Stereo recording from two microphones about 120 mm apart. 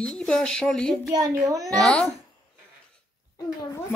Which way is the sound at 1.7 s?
5° left (ahead or behind).